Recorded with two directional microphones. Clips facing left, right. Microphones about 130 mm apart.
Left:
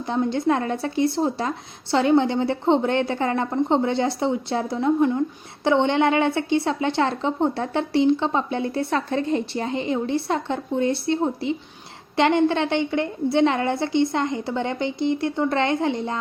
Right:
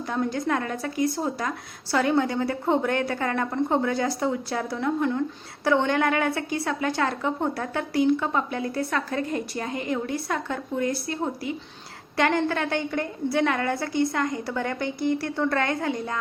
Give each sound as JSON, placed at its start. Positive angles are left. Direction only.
{"t": 0.1, "sound": "a woman's voice", "side_deg": 25}